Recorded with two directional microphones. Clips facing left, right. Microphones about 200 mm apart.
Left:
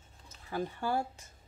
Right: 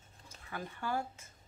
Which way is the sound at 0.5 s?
35° left (ahead or behind).